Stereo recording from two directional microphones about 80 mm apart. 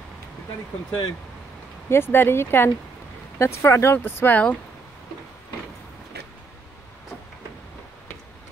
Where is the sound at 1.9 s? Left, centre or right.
Left.